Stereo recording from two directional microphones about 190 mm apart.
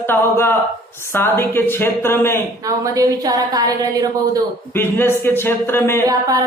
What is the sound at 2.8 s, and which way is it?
A woman's voice, 15° right (ahead or behind).